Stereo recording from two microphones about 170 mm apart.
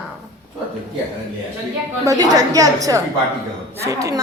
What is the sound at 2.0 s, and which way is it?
A woman's voice, 20° right (ahead or behind).